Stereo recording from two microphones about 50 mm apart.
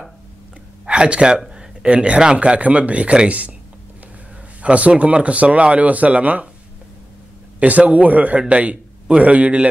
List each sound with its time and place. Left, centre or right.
0.8 s a man's voice: right
4.6 s a man's voice: right
7.6 s a man's voice: right